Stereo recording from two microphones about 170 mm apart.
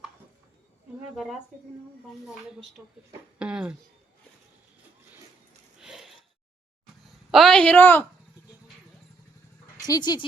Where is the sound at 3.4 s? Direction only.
5° right (ahead or behind).